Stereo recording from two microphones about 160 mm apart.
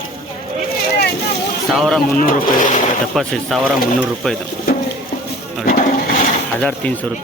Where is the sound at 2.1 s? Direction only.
60° left (ahead or behind).